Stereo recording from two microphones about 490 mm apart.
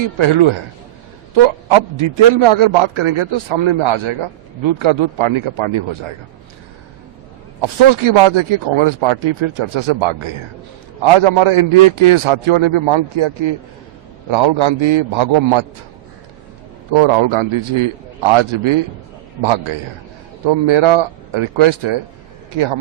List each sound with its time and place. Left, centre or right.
0.2 s a man's voice: right
7.6 s a man's voice: right
16.9 s a man's voice: right